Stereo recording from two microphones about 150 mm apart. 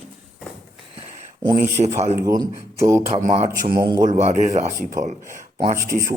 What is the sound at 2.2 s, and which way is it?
Speech, 25° right (ahead or behind).